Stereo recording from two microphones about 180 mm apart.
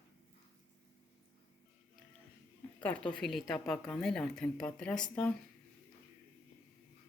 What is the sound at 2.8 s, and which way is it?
A woman's voice, 5° left (ahead or behind).